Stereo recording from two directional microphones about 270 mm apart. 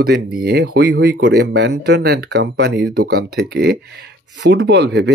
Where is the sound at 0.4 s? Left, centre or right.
Right.